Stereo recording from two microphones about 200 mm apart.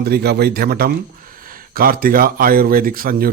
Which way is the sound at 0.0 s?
50° right (ahead or behind).